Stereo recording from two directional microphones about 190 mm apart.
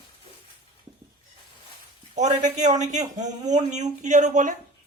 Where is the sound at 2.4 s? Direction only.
40° right (ahead or behind).